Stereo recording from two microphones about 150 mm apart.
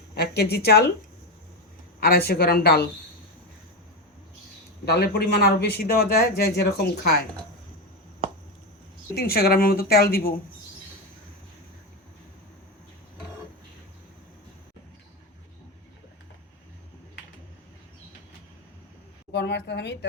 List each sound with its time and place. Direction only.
0.1 s a sound: 90° left
0.5 s speech: 90° left
2.0 s speech: 90° left
4.9 s speech: 90° left
9.1 s speech: 90° left